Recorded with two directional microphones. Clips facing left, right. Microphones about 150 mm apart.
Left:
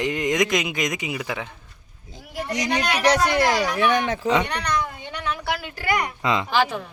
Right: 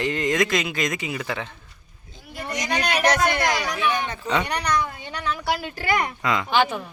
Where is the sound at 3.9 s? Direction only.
90° left.